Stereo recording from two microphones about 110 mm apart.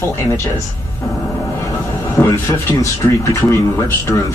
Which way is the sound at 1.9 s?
25° left (ahead or behind).